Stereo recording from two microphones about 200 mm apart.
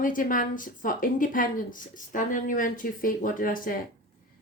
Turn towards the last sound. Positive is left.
turn(degrees=45)  # may be behind; listen again after turning